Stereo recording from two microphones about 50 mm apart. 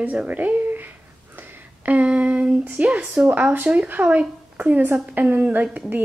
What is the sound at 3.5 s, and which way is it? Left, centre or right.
A woman's voice, right.